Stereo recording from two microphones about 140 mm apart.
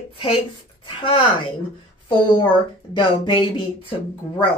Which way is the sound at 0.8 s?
35° left (ahead or behind).